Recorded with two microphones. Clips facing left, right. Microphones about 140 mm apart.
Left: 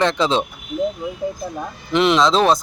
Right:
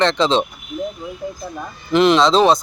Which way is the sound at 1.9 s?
Centre (ahead or behind).